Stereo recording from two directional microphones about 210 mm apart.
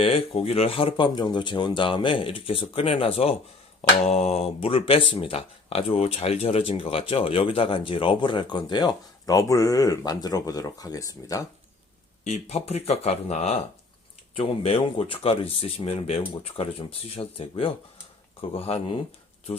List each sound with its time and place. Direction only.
0.0 s speech: 30° left (ahead or behind)
12.2 s speech: 30° left (ahead or behind)